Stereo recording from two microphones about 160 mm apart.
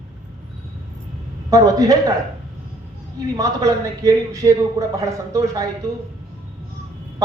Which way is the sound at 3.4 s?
20° right (ahead or behind).